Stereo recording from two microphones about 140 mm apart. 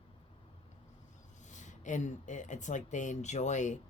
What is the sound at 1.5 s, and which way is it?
Speech, 60° left (ahead or behind).